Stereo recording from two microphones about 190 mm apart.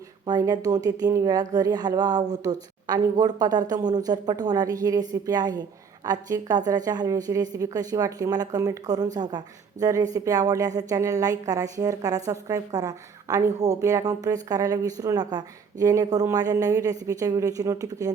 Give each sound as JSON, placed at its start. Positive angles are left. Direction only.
{"t": 0.3, "sound": "a woman's voice", "side_deg": -20}